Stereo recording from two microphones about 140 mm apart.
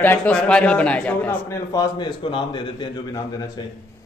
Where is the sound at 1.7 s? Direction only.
35° left (ahead or behind).